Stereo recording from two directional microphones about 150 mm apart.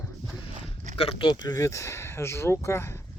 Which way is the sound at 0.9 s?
40° left (ahead or behind).